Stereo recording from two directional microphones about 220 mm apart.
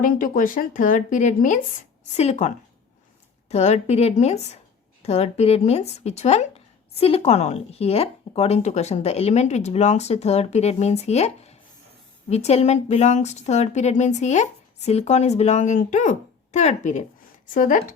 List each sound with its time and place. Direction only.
0.0 s speech: 40° left (ahead or behind)
3.5 s speech: 30° left (ahead or behind)